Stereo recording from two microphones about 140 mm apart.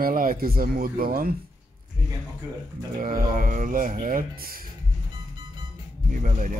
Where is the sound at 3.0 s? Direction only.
85° right.